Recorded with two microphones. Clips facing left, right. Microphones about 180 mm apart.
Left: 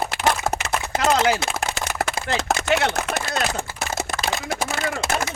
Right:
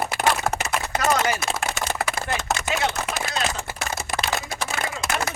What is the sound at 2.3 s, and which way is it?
Speech, 70° left (ahead or behind).